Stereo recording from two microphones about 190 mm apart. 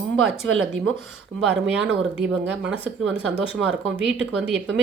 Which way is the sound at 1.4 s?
5° right (ahead or behind).